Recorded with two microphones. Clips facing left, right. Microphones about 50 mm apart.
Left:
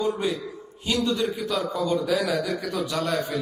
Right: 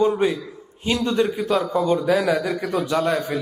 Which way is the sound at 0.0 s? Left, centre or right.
Right.